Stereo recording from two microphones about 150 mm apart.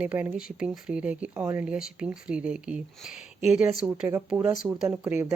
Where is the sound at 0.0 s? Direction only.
10° right (ahead or behind).